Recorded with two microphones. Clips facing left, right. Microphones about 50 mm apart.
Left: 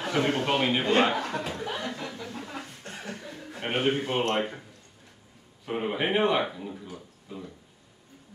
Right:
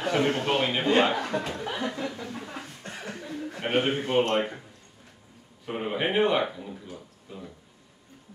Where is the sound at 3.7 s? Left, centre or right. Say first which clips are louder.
Right 2 dB; centre.